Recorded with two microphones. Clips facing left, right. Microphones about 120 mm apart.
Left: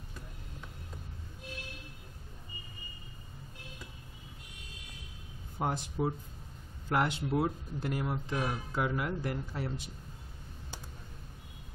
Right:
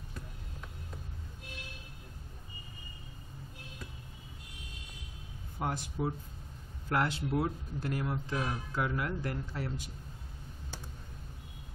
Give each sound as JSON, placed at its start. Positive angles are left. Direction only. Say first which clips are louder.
{"t": 5.6, "sound": "speech", "louder": "left 2 dB", "side_deg": 20}